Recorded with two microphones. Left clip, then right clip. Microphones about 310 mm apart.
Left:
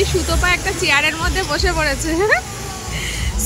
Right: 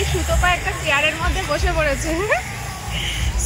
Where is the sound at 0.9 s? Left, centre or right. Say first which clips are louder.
Left 1 dB; centre.